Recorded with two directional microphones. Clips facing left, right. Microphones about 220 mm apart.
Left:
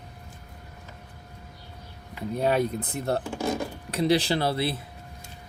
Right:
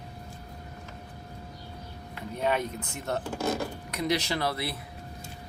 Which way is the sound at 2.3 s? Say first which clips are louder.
Left 5 dB; 35° left (ahead or behind).